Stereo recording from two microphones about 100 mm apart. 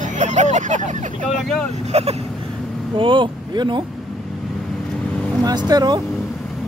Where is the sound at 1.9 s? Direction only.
90° right.